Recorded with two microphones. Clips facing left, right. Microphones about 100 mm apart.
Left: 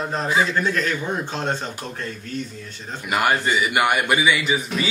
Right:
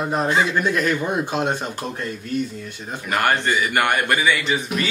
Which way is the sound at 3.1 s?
10° left (ahead or behind).